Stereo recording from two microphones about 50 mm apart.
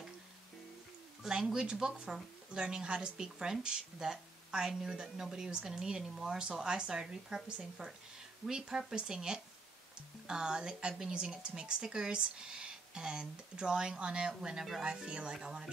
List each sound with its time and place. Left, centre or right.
1.3 s speech: centre